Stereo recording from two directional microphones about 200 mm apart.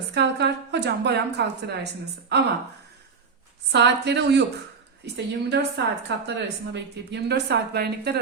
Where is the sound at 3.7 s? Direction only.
60° right (ahead or behind).